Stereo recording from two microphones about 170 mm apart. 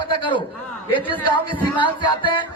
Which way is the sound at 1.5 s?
30° left (ahead or behind).